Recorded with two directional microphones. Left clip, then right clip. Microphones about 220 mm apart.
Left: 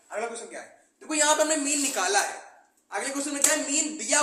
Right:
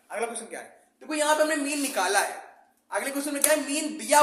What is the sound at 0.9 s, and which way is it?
A woman's voice, 25° right (ahead or behind).